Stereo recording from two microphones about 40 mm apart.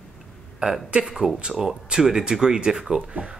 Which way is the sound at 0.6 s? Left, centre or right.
Centre.